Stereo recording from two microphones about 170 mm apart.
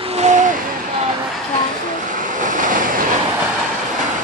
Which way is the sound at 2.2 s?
50° right (ahead or behind).